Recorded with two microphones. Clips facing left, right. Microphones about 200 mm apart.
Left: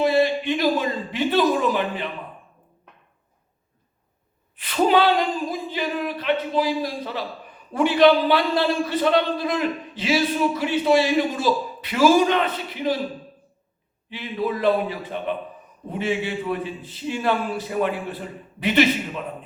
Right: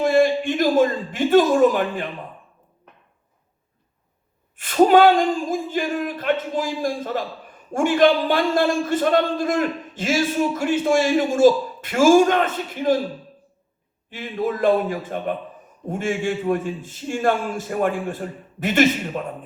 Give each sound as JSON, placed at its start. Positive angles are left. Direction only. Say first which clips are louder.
{"t": 0.0, "sound": "speech", "louder": "right 2 dB", "side_deg": -45}
{"t": 4.5, "sound": "speech", "louder": "right 5 dB", "side_deg": -45}
{"t": 14.1, "sound": "speech", "louder": "right 1 dB", "side_deg": -45}